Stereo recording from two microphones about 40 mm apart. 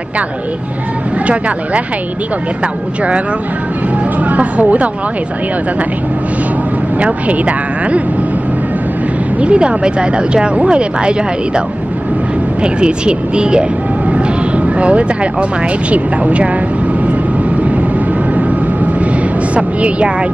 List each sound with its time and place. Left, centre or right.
1.2 s speech: right
4.2 s speech: right
7.0 s speech: right
9.4 s speech: right
12.6 s speech: right
14.8 s speech: right
19.5 s speech: right